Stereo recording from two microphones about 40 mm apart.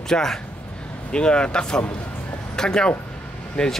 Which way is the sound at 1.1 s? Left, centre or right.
Left.